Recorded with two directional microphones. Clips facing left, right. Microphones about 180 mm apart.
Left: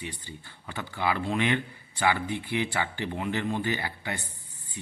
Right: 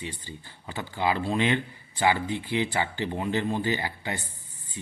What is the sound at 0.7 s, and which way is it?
Speech, 15° right (ahead or behind).